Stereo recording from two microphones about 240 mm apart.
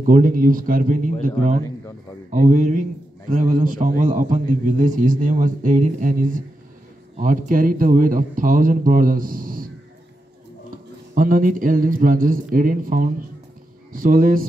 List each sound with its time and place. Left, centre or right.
0.0 s a man's voice: right
11.1 s a man's voice: right